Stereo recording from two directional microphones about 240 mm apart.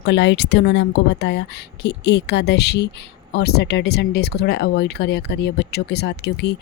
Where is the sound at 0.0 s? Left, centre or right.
Left.